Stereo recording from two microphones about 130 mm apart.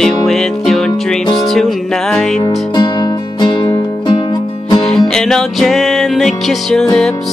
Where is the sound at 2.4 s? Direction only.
35° left (ahead or behind).